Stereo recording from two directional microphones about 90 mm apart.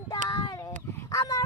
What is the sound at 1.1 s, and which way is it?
Dog, 40° left (ahead or behind).